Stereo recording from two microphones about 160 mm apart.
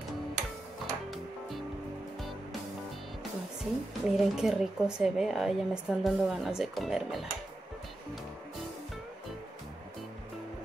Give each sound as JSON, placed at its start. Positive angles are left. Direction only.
{"t": 0.8, "sound": "music", "side_deg": 0}
{"t": 4.0, "sound": "speech", "side_deg": 0}